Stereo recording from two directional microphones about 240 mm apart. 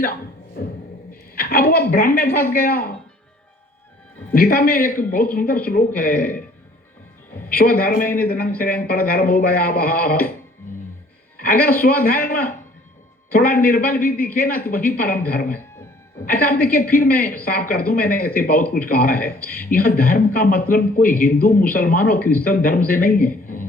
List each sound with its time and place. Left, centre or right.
1.1 s a woman's voice: left
4.4 s a man's voice: left
7.6 s a man's voice: left
11.3 s a man's voice: left
15.4 s music: centre
16.2 s a man's voice: left